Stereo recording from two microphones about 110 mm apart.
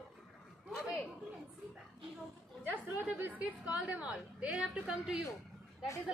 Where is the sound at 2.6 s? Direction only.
15° right (ahead or behind).